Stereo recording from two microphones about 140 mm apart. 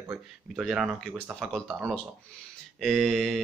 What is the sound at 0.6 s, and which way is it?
Speech, 5° right (ahead or behind).